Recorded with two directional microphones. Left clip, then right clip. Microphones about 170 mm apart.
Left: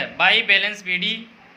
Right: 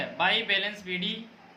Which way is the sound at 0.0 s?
20° left (ahead or behind).